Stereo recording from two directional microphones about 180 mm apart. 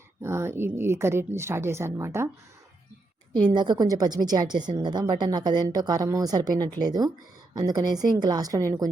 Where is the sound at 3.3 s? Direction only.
25° right (ahead or behind).